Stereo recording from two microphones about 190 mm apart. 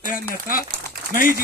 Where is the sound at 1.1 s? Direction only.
45° left (ahead or behind).